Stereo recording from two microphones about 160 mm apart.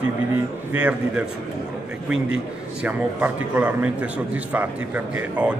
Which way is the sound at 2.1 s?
5° right (ahead or behind).